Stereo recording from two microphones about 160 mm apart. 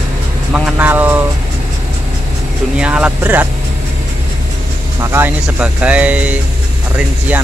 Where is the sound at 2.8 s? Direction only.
5° right (ahead or behind).